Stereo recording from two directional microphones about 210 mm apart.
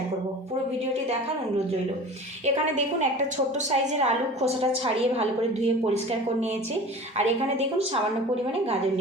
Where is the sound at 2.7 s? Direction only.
35° right (ahead or behind).